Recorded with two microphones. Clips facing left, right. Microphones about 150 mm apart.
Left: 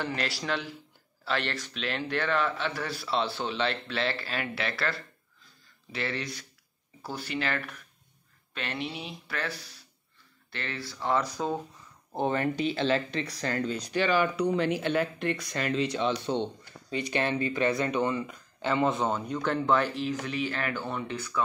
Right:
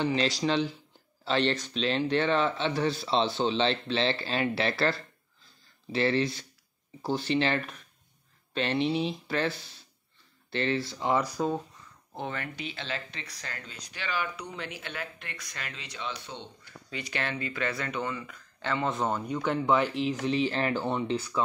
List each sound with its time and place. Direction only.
0.0 s speech: 20° right (ahead or behind)
12.2 s speech: 40° left (ahead or behind)
14.3 s speech: 60° left (ahead or behind)
14.9 s speech: 30° left (ahead or behind)
15.5 s speech: 45° left (ahead or behind)
15.9 s speech: 30° left (ahead or behind)
18.9 s speech: centre (ahead or behind)
19.3 s speech: 15° right (ahead or behind)